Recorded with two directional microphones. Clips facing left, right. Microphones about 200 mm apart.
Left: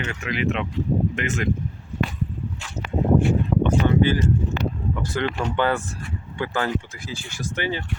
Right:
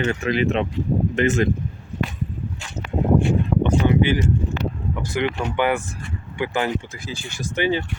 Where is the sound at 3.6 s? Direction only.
15° right (ahead or behind).